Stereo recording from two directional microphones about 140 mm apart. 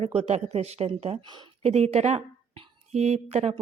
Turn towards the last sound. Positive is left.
turn(degrees=-50)  # may be behind; listen again after turning